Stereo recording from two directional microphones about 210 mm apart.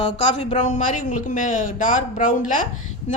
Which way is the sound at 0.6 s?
35° left (ahead or behind).